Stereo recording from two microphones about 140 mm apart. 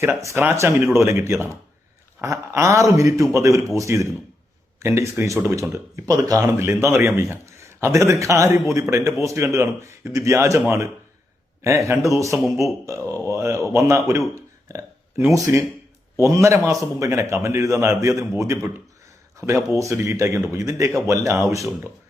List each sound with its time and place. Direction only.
0.0 s speech: 20° right (ahead or behind)
11.6 s speech: 20° right (ahead or behind)